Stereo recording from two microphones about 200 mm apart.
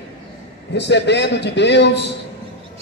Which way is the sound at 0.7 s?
60° left (ahead or behind).